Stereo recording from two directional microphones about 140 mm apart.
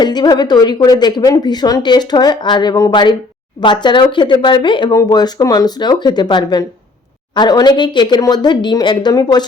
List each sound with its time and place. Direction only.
0.0 s a woman's voice: 30° left (ahead or behind)